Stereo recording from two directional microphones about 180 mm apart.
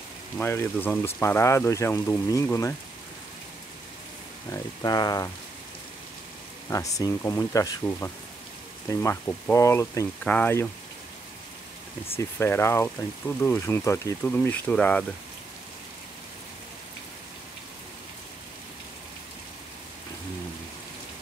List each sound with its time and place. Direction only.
0.4 s speech: 10° left (ahead or behind)
4.5 s speech: 20° left (ahead or behind)
6.7 s speech: 20° left (ahead or behind)
12.2 s speech: 15° left (ahead or behind)